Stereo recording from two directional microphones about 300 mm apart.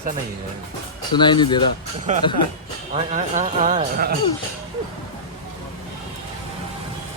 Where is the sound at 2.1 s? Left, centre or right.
Right.